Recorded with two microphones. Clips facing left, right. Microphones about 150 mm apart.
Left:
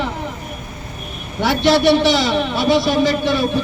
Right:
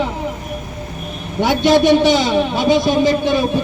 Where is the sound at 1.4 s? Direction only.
20° right (ahead or behind).